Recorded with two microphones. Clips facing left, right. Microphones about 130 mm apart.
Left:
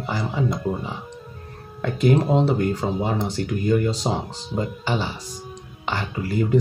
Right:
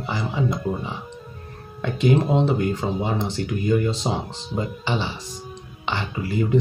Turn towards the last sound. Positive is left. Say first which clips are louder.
# left 1 dB
turn(degrees=45)  # may be behind; listen again after turning